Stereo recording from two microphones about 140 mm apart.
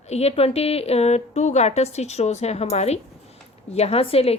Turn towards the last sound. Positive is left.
turn(degrees=45)  # may be behind; listen again after turning